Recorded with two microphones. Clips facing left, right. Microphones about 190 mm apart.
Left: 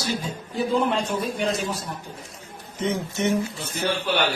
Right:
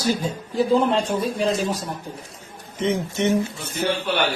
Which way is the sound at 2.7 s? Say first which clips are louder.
Right 3 dB; 20° right (ahead or behind).